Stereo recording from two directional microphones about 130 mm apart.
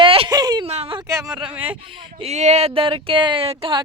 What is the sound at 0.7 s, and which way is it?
Speech, 50° right (ahead or behind).